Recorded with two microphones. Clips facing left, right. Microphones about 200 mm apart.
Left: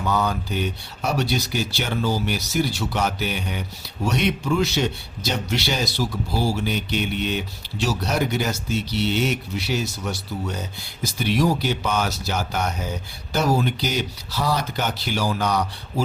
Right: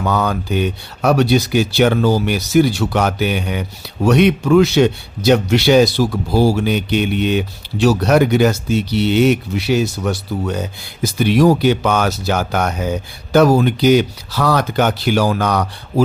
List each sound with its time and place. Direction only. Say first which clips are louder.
0.0 s speech: right 5 dB; 75° right (ahead or behind)
13.3 s speech: right 10 dB; 55° right (ahead or behind)